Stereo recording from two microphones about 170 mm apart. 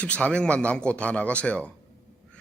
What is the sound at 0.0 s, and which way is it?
Speech, 5° left (ahead or behind).